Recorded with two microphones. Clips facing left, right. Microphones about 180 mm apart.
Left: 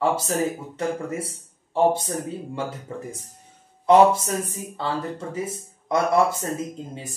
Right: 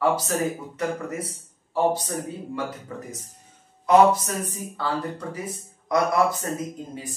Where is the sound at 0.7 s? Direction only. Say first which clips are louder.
Left 3 dB; 25° left (ahead or behind).